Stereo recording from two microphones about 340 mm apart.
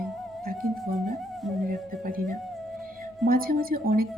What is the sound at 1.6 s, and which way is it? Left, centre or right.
Speech, right.